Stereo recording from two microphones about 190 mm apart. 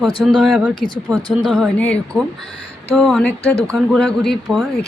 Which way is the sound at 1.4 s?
Centre (ahead or behind).